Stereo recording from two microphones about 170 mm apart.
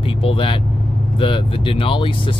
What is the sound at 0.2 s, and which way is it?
Speech, 30° left (ahead or behind).